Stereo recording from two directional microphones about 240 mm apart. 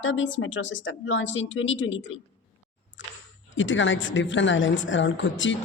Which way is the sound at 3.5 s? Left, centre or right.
Left.